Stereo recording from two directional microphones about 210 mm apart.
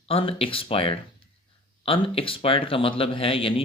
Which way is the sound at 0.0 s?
25° left (ahead or behind).